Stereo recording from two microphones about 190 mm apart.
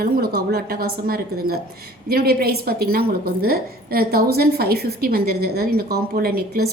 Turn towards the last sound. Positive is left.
turn(degrees=-55)  # may be behind; listen again after turning